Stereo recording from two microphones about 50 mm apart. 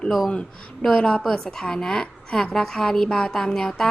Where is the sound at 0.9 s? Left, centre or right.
Centre.